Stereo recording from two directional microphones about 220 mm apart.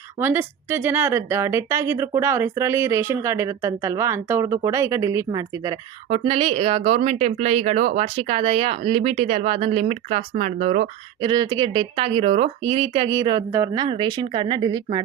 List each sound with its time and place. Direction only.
0.2 s speech: 10° right (ahead or behind); by 10.8 s 30° right (ahead or behind)
11.2 s speech: 20° right (ahead or behind)